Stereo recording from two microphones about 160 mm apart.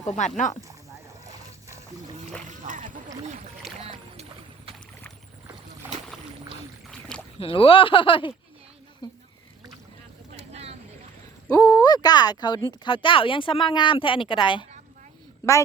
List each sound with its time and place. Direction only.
0.2 s speech: 50° left (ahead or behind)
2.5 s speech: 55° right (ahead or behind)
3.8 s boat: 40° right (ahead or behind)
7.3 s speech: 35° left (ahead or behind)
10.5 s vehicle: 40° right (ahead or behind)
11.4 s a woman's voice: 20° left (ahead or behind)